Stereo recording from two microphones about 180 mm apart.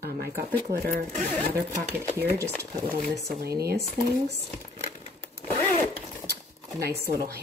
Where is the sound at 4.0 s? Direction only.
5° left (ahead or behind).